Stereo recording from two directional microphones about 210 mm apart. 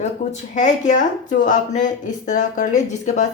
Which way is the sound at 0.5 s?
35° left (ahead or behind).